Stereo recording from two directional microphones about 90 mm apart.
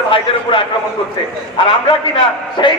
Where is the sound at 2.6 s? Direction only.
60° left (ahead or behind).